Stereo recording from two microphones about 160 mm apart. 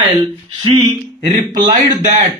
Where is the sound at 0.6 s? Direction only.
30° right (ahead or behind).